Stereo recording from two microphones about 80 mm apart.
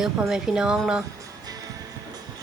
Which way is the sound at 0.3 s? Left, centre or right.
Centre.